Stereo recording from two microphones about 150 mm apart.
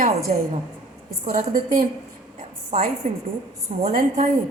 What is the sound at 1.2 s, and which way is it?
Speech, 70° right (ahead or behind).